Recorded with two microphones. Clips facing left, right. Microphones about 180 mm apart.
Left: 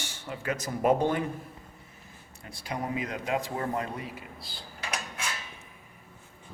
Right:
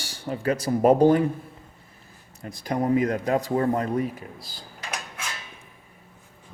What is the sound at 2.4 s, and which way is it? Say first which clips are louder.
Speech: right 9 dB; 40° right (ahead or behind).